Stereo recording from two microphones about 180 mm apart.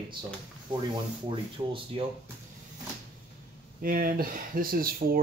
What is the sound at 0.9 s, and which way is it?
Speech, 30° right (ahead or behind).